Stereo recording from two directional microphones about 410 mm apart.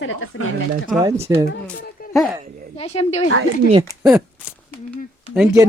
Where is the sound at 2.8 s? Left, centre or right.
Centre.